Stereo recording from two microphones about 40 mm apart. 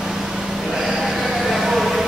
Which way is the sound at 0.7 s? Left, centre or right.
Centre.